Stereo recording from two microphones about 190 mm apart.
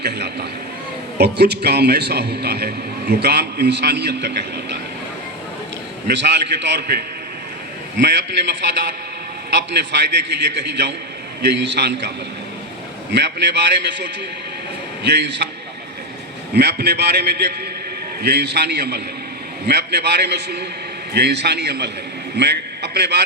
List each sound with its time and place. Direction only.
0.0 s a man's voice: 60° right (ahead or behind)
6.1 s a man's voice: 65° right (ahead or behind)
9.9 s a man's voice: 65° right (ahead or behind)
16.6 s a man's voice: 60° right (ahead or behind)